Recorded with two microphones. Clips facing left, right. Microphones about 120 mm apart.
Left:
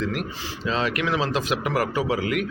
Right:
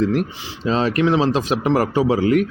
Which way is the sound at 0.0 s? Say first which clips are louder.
Right 8 dB; 35° right (ahead or behind).